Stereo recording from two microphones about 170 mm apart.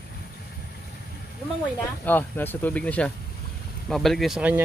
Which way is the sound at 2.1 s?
10° left (ahead or behind).